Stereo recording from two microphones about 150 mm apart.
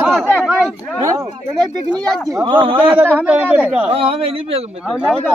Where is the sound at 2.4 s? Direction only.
35° right (ahead or behind).